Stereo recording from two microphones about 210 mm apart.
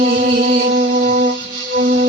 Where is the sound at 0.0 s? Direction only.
45° right (ahead or behind).